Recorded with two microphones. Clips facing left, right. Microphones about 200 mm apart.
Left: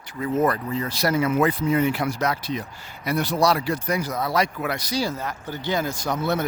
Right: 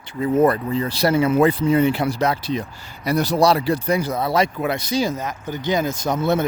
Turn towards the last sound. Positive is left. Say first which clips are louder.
# right 4 dB
turn(degrees=-25)  # may be behind; listen again after turning